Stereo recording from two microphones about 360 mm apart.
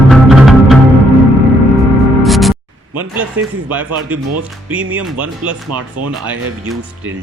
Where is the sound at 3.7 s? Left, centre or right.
Centre.